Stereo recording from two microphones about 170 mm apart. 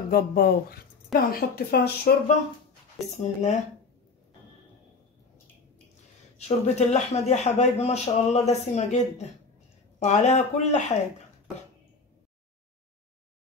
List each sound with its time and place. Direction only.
0.1 s speech: 65° left (ahead or behind)
3.2 s speech: 45° left (ahead or behind)
6.3 s speech: 40° left (ahead or behind)